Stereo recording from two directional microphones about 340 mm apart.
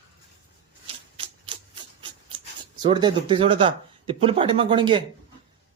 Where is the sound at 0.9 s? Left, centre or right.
Centre.